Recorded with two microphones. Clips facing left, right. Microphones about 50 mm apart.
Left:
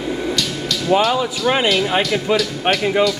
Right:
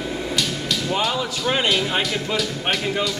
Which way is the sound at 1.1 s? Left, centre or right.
Centre.